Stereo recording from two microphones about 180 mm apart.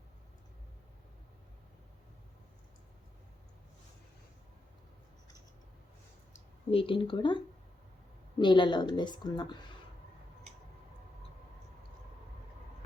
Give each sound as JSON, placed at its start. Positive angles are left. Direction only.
{"t": 6.3, "sound": "a woman's voice", "side_deg": 30}